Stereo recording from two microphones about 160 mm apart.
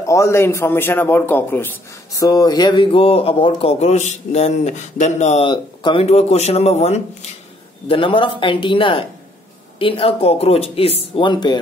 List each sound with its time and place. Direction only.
0.0 s a man's voice: 20° left (ahead or behind)
2.1 s a man's voice: 25° left (ahead or behind); by 5.5 s 45° left (ahead or behind)
5.5 s a man's voice: 30° left (ahead or behind)
7.9 s a man's voice: 30° left (ahead or behind)